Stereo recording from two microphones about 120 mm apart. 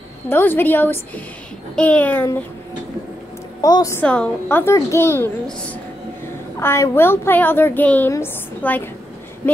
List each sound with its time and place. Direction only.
0.3 s a woman's voice: 15° left (ahead or behind)
3.6 s a woman's voice: 30° left (ahead or behind)
4.0 s a woman's voice: 10° left (ahead or behind)